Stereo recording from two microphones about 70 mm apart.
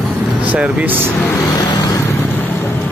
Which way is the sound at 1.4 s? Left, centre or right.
Left.